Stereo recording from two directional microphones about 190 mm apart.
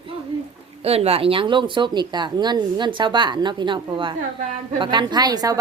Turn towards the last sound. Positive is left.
turn(degrees=-20)  # may be behind; listen again after turning